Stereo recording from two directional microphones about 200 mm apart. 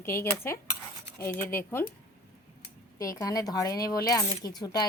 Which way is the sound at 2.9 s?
15° left (ahead or behind).